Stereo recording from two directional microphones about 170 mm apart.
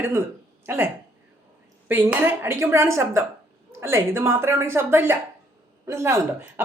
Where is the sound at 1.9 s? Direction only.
10° right (ahead or behind).